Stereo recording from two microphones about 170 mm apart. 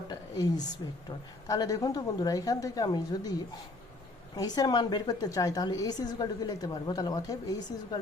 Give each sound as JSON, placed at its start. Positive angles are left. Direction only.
{"t": 0.1, "sound": "a woman's voice", "side_deg": 25}
{"t": 4.4, "sound": "a woman's voice", "side_deg": 25}